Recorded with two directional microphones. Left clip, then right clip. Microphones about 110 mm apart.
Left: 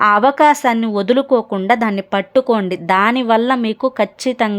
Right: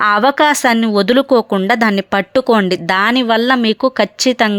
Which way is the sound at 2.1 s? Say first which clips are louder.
Right 1 dB; 25° right (ahead or behind).